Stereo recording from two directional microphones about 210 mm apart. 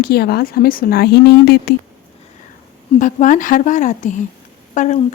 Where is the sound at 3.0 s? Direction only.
40° left (ahead or behind).